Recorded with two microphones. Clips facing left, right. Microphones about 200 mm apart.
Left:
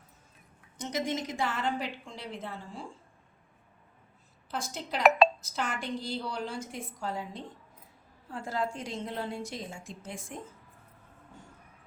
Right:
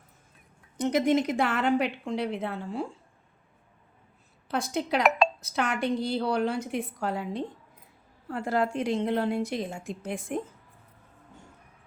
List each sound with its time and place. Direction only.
0.8 s a woman's voice: 60° right (ahead or behind)
4.4 s a woman's voice: 60° right (ahead or behind)